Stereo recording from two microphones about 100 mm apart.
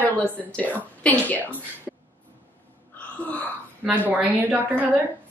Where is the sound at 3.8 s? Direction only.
15° right (ahead or behind).